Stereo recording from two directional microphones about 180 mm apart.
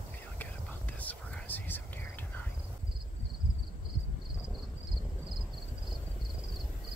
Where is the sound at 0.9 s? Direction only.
10° left (ahead or behind).